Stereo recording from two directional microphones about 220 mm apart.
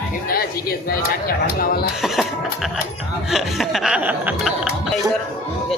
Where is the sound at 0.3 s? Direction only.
45° left (ahead or behind).